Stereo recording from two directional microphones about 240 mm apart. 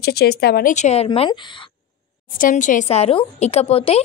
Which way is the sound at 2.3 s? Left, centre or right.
Left.